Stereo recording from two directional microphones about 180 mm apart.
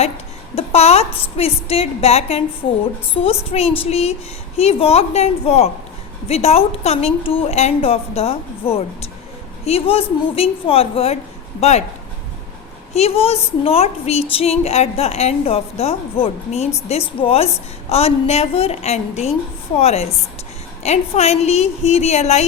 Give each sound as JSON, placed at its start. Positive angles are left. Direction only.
{"t": 0.5, "sound": "a woman's voice", "side_deg": 35}
{"t": 12.9, "sound": "a woman's voice", "side_deg": 35}